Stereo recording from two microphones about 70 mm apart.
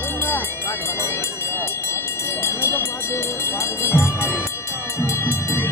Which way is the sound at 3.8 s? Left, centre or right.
Left.